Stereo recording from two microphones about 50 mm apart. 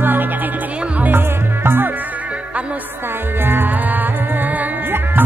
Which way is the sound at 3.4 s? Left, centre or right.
Right.